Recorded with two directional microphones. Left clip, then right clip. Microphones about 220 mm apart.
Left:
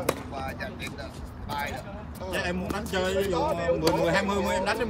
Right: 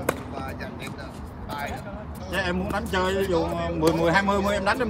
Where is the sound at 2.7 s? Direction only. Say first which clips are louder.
Right 3 dB; 25° right (ahead or behind).